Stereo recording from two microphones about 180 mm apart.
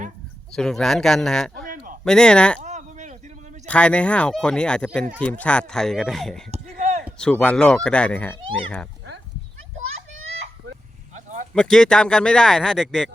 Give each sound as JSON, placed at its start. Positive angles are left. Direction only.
{"t": 0.5, "sound": "speech", "side_deg": 0}
{"t": 1.6, "sound": "a sound", "side_deg": -50}
{"t": 2.0, "sound": "speech", "side_deg": 5}
{"t": 2.6, "sound": "a sound", "side_deg": -40}
{"t": 3.7, "sound": "speech", "side_deg": 5}
{"t": 11.5, "sound": "speech", "side_deg": 5}